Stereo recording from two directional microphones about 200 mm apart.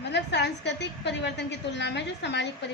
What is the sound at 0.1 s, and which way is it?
A woman's voice, 60° left (ahead or behind).